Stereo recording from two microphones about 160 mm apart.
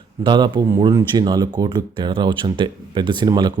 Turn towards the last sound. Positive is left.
turn(degrees=-25)  # may be behind; listen again after turning